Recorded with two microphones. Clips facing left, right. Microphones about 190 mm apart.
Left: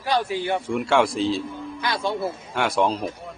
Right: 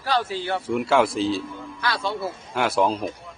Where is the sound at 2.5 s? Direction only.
Centre (ahead or behind).